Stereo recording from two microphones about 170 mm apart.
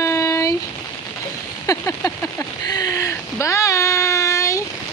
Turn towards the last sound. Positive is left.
turn(degrees=20)  # may be behind; listen again after turning